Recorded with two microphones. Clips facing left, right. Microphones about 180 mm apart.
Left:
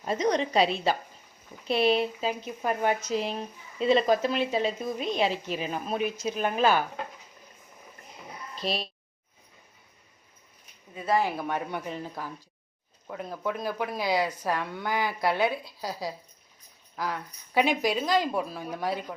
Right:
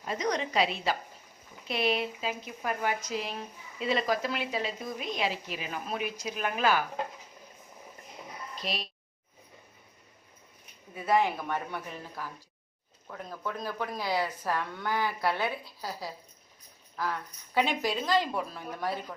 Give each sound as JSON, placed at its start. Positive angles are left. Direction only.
{"t": 0.0, "sound": "a woman's voice", "side_deg": 30}
{"t": 8.6, "sound": "a woman's voice", "side_deg": 30}
{"t": 10.9, "sound": "speech", "side_deg": 0}
{"t": 11.4, "sound": "speech", "side_deg": 15}
{"t": 13.1, "sound": "speech", "side_deg": 15}